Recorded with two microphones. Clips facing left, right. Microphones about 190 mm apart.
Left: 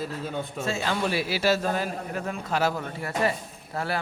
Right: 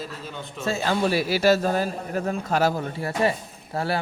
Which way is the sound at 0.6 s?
40° right (ahead or behind).